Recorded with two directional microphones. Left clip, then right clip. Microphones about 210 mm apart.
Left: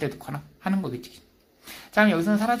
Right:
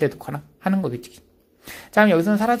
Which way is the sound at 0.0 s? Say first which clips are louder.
Right 8 dB; 35° right (ahead or behind).